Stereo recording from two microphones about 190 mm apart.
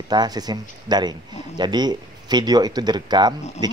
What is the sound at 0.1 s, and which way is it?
Speech, 20° right (ahead or behind).